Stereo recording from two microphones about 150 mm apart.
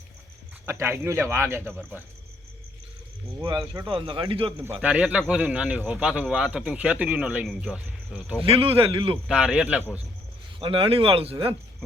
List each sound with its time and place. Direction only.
0.6 s a man's voice: 15° right (ahead or behind)
3.8 s speech: 30° right (ahead or behind)
4.5 s a man's voice: 15° right (ahead or behind)
8.4 s speech: 40° right (ahead or behind)
9.2 s speech: 5° right (ahead or behind)
10.6 s speech: 35° right (ahead or behind)